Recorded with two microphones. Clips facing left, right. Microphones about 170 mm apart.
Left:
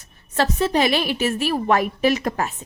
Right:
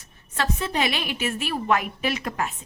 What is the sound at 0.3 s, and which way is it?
A woman's voice, 35° left (ahead or behind).